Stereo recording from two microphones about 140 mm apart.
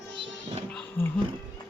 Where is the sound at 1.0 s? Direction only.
15° left (ahead or behind).